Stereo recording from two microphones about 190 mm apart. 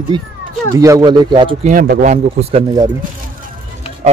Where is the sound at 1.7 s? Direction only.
45° right (ahead or behind).